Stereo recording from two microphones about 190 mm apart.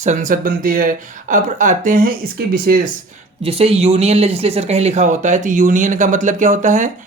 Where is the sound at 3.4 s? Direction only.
30° right (ahead or behind).